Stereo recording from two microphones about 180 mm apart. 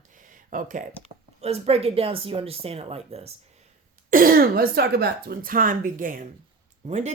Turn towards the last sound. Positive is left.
turn(degrees=-40)  # may be behind; listen again after turning